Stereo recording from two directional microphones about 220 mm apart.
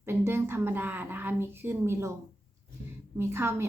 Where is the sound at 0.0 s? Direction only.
10° right (ahead or behind).